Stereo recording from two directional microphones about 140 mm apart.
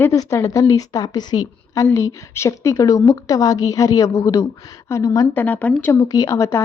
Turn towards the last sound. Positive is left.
turn(degrees=20)  # may be behind; listen again after turning